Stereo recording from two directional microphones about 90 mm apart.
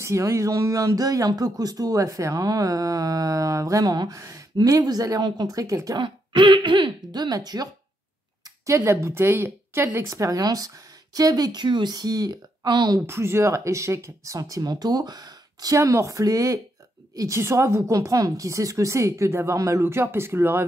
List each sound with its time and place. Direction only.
0.0 s speech: 30° right (ahead or behind)
4.2 s a sound: 35° right (ahead or behind)
4.6 s speech: 45° right (ahead or behind)
5.9 s speech: 65° right (ahead or behind); by 7.7 s 45° right (ahead or behind)
8.5 s speech: 35° right (ahead or behind)
10.0 s speech: 40° right (ahead or behind)
13.0 s speech: 30° right (ahead or behind); by 15.8 s 45° right (ahead or behind)
15.8 s a woman's voice: 35° right (ahead or behind)
17.4 s speech: 30° right (ahead or behind)